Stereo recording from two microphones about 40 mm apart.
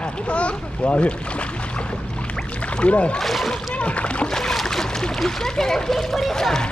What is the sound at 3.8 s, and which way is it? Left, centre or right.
Splash, left.